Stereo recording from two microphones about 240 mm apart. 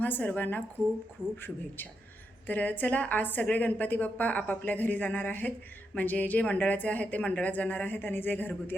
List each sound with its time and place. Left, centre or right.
0.0 s a woman's voice: centre